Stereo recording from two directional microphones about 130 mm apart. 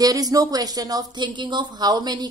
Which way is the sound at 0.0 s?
30° right (ahead or behind).